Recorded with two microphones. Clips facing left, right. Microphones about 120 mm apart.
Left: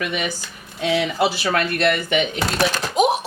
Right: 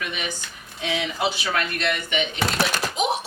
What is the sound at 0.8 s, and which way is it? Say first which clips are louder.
Speech: left 7 dB; 55° left (ahead or behind).